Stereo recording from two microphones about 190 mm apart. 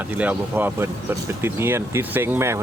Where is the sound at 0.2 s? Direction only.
10° right (ahead or behind).